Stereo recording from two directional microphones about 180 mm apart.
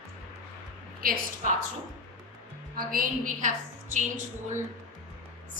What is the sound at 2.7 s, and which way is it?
Speech, 50° right (ahead or behind).